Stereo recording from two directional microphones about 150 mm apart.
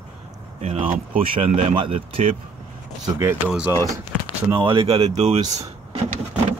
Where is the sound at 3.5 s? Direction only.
10° right (ahead or behind).